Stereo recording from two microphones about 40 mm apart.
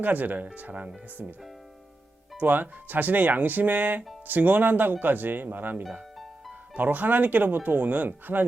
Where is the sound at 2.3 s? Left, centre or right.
Right.